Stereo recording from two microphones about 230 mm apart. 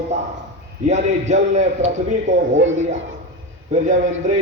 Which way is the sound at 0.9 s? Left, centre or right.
Right.